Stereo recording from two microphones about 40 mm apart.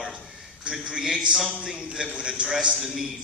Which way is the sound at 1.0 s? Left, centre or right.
Centre.